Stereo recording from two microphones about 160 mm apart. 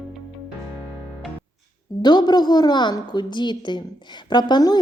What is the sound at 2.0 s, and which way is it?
A woman's voice, 25° left (ahead or behind).